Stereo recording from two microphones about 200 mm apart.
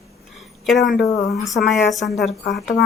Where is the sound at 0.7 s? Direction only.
Centre (ahead or behind).